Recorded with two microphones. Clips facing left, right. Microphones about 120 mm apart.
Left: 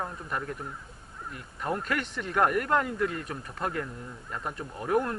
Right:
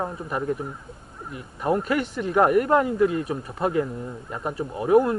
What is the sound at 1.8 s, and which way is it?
Speech, 5° right (ahead or behind).